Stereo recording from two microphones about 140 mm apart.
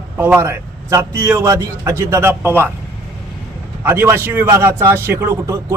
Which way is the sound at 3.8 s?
15° right (ahead or behind).